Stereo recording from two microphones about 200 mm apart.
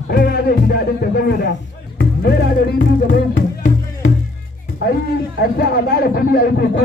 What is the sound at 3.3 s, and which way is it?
Music, 40° left (ahead or behind).